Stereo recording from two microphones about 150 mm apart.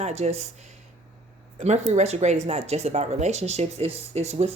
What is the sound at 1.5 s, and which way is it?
Speech, 50° right (ahead or behind).